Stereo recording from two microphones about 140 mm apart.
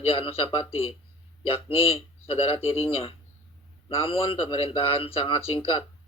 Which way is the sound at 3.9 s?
40° left (ahead or behind).